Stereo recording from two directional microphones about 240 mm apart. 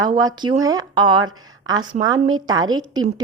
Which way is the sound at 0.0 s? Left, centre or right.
Centre.